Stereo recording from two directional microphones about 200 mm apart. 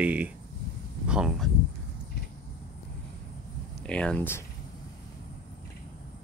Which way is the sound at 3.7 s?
5° left (ahead or behind).